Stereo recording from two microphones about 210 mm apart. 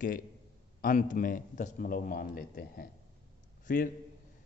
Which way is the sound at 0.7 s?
40° left (ahead or behind).